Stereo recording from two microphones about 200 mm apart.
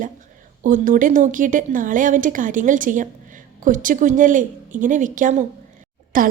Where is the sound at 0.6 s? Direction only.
40° right (ahead or behind).